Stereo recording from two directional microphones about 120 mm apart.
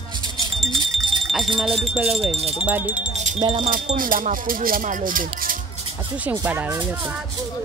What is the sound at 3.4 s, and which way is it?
Wind chime, 55° right (ahead or behind).